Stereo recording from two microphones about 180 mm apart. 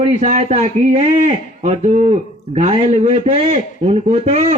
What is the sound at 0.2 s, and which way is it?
A man's voice, 40° right (ahead or behind).